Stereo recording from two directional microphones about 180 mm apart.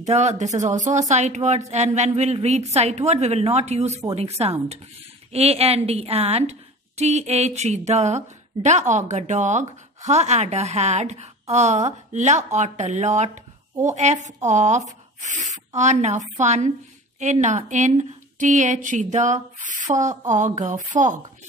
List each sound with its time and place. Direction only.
0.0 s a woman's voice: 40° right (ahead or behind)